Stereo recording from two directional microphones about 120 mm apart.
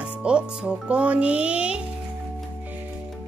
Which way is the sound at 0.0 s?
10° right (ahead or behind).